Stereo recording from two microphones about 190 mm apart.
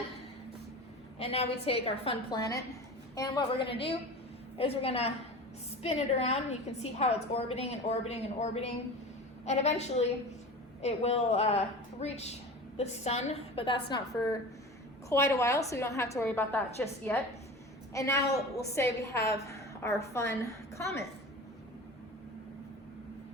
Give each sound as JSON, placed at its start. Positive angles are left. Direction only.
{"t": 1.2, "sound": "a woman's voice", "side_deg": 30}